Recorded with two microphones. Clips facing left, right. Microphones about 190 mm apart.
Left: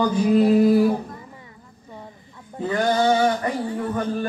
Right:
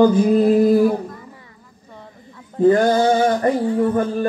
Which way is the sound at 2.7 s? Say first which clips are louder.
Right 5 dB; 45° right (ahead or behind).